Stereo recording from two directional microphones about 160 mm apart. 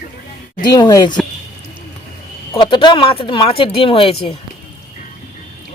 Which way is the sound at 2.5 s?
30° left (ahead or behind).